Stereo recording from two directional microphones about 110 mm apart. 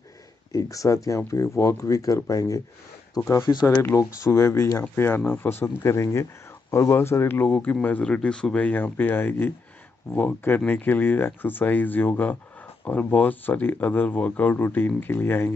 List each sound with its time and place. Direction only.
0.5 s speech: 30° left (ahead or behind)